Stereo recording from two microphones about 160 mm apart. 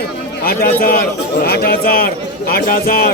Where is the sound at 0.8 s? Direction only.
65° left (ahead or behind).